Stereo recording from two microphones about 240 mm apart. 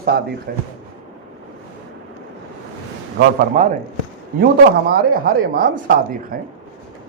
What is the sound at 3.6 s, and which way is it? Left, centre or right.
A woman's voice, right.